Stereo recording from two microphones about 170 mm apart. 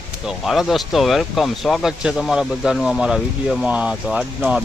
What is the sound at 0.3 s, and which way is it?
Speech, centre (ahead or behind).